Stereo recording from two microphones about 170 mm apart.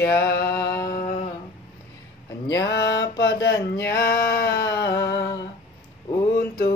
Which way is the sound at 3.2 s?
85° left.